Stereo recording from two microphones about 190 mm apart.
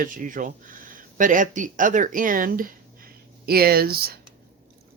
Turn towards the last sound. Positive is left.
turn(degrees=-55)  # may be behind; listen again after turning